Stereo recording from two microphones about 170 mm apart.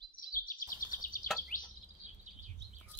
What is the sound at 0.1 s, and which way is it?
Bird vocalization, 55° left (ahead or behind).